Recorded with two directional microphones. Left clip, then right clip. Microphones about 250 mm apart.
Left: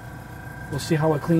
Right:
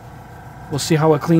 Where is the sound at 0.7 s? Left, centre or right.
Right.